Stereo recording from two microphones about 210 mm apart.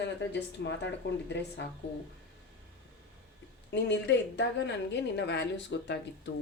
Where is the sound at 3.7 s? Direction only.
55° left (ahead or behind).